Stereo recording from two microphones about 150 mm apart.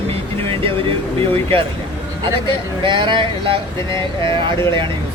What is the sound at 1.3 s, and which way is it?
Speech, 40° right (ahead or behind).